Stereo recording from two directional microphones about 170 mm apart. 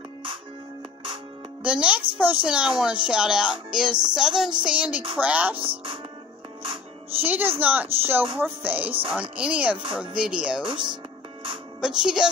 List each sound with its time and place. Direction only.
1.6 s a child's voice: 5° right (ahead or behind)
2.1 s music: 5° right (ahead or behind)
5.1 s speech: 10° right (ahead or behind)
5.6 s speech: 30° right (ahead or behind)
7.2 s speech: 10° right (ahead or behind)
10.1 s music: 5° right (ahead or behind)
10.6 s speech: 30° right (ahead or behind)
11.8 s music: 5° right (ahead or behind)